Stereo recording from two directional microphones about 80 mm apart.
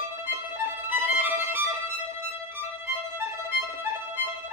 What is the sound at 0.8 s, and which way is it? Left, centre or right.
Music, right.